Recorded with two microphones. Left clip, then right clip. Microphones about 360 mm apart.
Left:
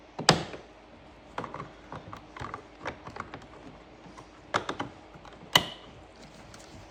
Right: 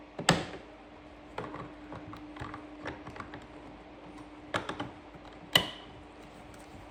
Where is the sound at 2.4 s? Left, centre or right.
Centre.